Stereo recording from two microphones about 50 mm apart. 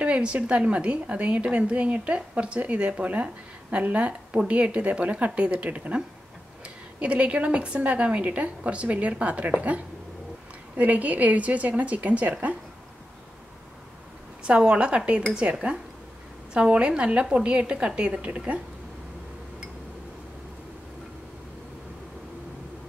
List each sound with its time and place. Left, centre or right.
0.0 s a woman's voice: right
10.8 s a woman's voice: right
14.4 s a woman's voice: right
16.5 s a woman's voice: right